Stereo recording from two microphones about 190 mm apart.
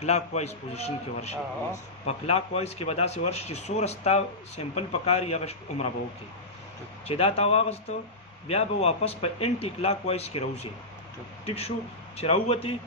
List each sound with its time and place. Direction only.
0.0 s a man's voice: 35° left (ahead or behind)
7.1 s a man's voice: 30° left (ahead or behind)